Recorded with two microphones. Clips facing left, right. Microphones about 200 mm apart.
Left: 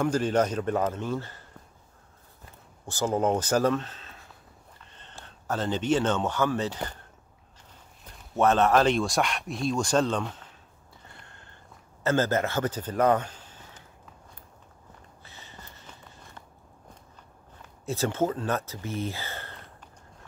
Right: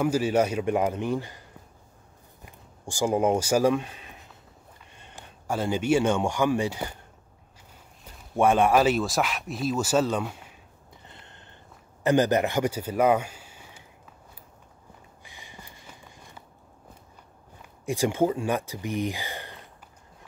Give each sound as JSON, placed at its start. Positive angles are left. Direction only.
{"t": 0.0, "sound": "a man's voice", "side_deg": -10}
{"t": 2.4, "sound": "speech", "side_deg": -15}
{"t": 8.1, "sound": "speech", "side_deg": -10}
{"t": 11.1, "sound": "sniff", "side_deg": -20}
{"t": 12.0, "sound": "speech", "side_deg": -15}
{"t": 15.2, "sound": "walk", "side_deg": -15}
{"t": 17.6, "sound": "speech", "side_deg": -15}